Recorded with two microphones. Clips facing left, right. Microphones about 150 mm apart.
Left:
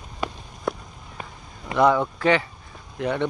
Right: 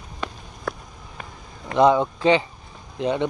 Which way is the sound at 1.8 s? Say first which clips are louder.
Right 2 dB; 20° right (ahead or behind).